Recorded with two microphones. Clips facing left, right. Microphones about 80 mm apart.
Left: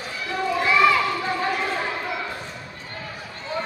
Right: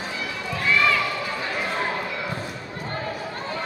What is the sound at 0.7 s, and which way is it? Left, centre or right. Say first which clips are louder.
Run: left 3 dB; centre.